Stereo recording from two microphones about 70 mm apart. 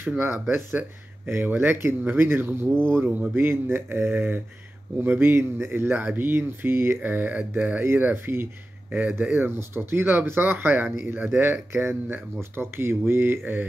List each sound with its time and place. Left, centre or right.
0.3 s speech: right